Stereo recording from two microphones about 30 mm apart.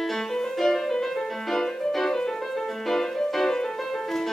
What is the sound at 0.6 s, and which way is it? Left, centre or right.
Music, centre.